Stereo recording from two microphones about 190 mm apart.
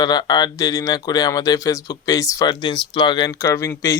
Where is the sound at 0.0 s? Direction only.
20° left (ahead or behind).